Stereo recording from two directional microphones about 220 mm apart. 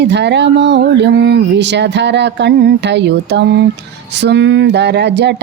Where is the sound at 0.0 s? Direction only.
50° right (ahead or behind).